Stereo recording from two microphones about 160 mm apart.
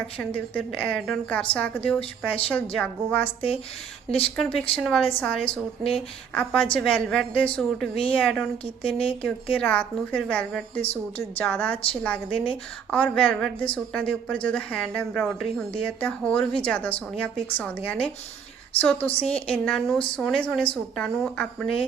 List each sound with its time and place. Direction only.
0.2 s a woman's voice: 10° left (ahead or behind)
3.2 s a woman's voice: 35° left (ahead or behind)
4.4 s a woman's voice: 5° left (ahead or behind)
5.5 s a woman's voice: 35° left (ahead or behind)
6.3 s a woman's voice: 5° left (ahead or behind)